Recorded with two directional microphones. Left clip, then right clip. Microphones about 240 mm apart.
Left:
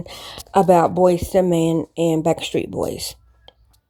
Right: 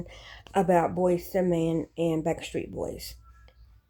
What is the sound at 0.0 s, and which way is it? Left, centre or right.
Speech, left.